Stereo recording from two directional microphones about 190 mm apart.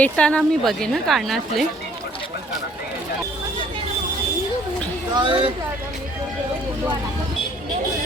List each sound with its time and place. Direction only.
0.0 s speech: 5° left (ahead or behind)
5.1 s speech: 25° right (ahead or behind)